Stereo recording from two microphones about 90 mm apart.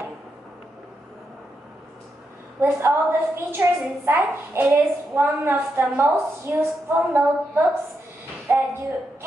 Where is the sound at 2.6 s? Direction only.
25° right (ahead or behind).